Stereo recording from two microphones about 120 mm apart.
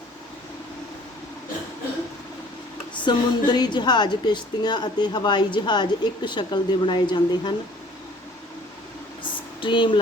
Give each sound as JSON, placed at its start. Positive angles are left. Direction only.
{"t": 3.0, "sound": "a woman's voice", "side_deg": 40}
{"t": 9.6, "sound": "speech", "side_deg": 45}